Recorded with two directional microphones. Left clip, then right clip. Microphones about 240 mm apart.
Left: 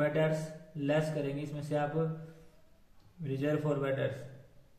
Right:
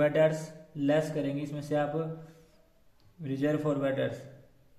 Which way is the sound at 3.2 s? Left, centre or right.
Right.